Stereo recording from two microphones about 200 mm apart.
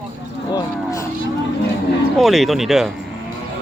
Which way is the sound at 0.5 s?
15° left (ahead or behind).